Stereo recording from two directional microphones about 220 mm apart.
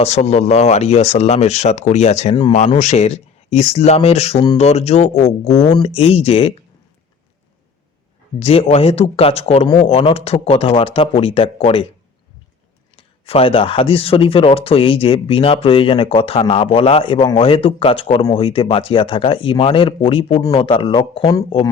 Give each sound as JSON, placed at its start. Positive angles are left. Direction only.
{"t": 0.0, "sound": "speech", "side_deg": 30}
{"t": 8.4, "sound": "speech", "side_deg": 25}
{"t": 13.0, "sound": "speech", "side_deg": 25}